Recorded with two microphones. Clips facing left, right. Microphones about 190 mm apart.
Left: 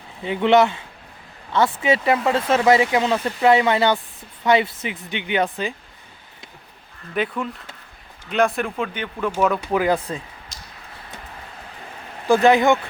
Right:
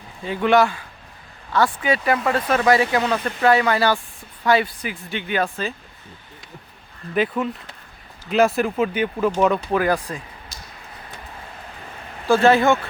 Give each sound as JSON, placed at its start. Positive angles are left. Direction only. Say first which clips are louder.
{"t": 0.2, "sound": "speech", "louder": "left 1 dB", "side_deg": 20}
{"t": 7.1, "sound": "speech", "louder": "right 3 dB", "side_deg": 0}
{"t": 9.7, "sound": "speech", "louder": "even", "side_deg": 20}
{"t": 10.5, "sound": "a sound", "louder": "right 1 dB", "side_deg": 90}
{"t": 12.3, "sound": "speech", "louder": "even", "side_deg": 15}